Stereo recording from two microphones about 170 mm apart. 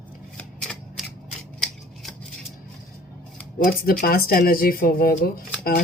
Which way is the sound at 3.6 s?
60° left (ahead or behind).